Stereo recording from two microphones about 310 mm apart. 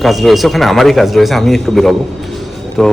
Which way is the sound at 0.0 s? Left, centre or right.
Centre.